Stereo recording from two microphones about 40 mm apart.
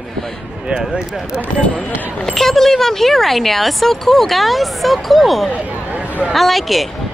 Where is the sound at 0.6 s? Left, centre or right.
Centre.